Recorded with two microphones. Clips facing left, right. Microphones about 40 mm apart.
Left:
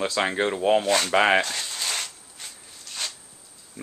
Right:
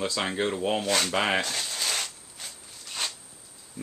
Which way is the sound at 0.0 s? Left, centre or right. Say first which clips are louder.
Left 4 dB; left.